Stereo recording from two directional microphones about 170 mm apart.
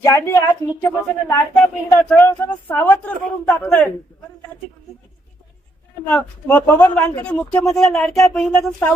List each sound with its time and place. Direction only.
0.0 s a woman's voice: 15° left (ahead or behind)
6.1 s a woman's voice: 10° left (ahead or behind)